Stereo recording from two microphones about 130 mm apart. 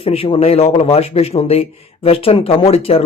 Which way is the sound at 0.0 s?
45° left (ahead or behind).